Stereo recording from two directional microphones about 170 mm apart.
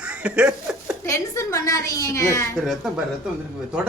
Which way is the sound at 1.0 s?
15° left (ahead or behind).